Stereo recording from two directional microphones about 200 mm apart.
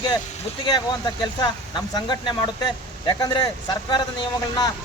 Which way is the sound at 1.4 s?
20° left (ahead or behind).